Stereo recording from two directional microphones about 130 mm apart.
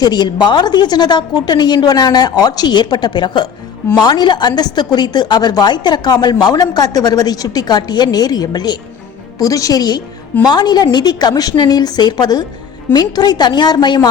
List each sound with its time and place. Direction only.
0.0 s a woman's voice: 35° left (ahead or behind)